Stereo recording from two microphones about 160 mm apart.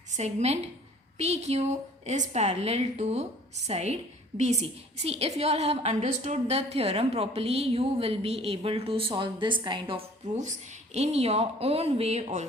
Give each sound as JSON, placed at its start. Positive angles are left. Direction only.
{"t": 0.1, "sound": "a woman's voice", "side_deg": -45}
{"t": 10.3, "sound": "a woman's voice", "side_deg": -50}